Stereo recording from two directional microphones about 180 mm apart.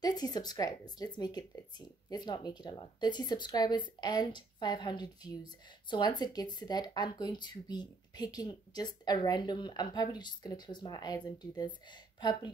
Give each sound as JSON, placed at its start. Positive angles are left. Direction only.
{"t": 0.0, "sound": "speech", "side_deg": 20}